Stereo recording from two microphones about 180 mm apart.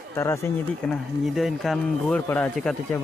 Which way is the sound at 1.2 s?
Centre (ahead or behind).